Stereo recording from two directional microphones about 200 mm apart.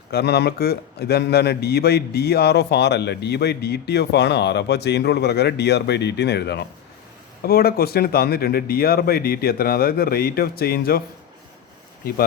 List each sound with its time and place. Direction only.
0.1 s a man's voice: 55° left (ahead or behind)